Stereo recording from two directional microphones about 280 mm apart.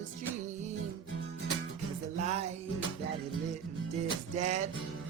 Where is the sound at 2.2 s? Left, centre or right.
Right.